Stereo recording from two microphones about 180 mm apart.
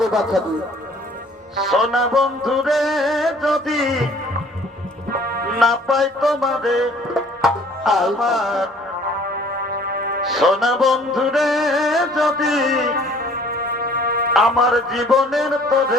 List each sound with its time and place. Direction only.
0.0 s speech: centre (ahead or behind)
1.6 s music: centre (ahead or behind)
5.1 s music: 55° right (ahead or behind)
5.5 s music: centre (ahead or behind)
9.3 s music: 55° right (ahead or behind)
10.2 s music: centre (ahead or behind)
12.9 s music: 55° right (ahead or behind)
14.3 s music: centre (ahead or behind)